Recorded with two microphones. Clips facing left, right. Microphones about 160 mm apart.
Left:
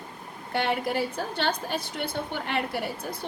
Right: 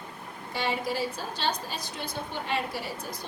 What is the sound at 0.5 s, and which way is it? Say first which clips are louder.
A woman's voice: left 3 dB; 60° left (ahead or behind).